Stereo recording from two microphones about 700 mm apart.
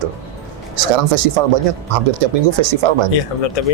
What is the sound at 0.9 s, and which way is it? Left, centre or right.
Speech, right.